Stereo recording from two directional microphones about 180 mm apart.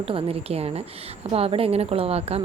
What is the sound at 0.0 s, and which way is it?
A woman's voice, 30° right (ahead or behind).